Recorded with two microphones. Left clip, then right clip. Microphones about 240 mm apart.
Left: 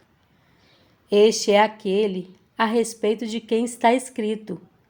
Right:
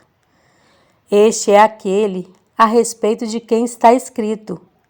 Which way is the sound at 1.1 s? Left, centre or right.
Right.